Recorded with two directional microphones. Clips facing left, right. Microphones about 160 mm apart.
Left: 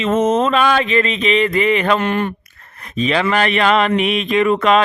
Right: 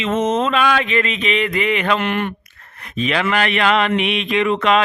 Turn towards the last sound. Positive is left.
turn(degrees=40)  # may be behind; listen again after turning